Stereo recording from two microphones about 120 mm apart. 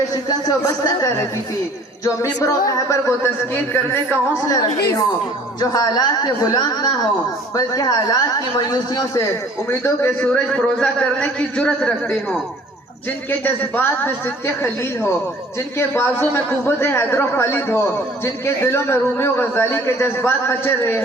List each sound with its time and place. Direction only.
0.1 s a woman's voice: 30° left (ahead or behind)
4.4 s a man's voice: 30° left (ahead or behind)
9.6 s a man's voice: 20° left (ahead or behind)
10.5 s a man's voice: 5° left (ahead or behind)
13.4 s a man's voice: 15° left (ahead or behind)